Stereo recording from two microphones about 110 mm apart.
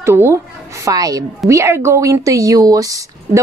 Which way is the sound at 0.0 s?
25° right (ahead or behind).